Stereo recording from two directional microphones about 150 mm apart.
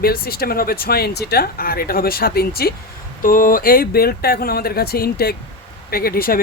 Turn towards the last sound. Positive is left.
turn(degrees=85)